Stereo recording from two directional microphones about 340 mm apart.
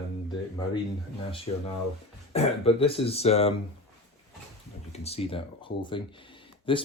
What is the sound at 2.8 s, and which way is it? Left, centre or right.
Speech, centre.